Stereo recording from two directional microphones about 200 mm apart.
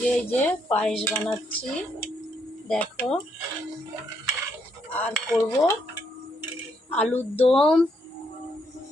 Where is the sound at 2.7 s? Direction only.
5° left (ahead or behind).